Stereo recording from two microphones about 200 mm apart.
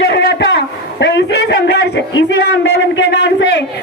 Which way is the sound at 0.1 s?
60° left (ahead or behind).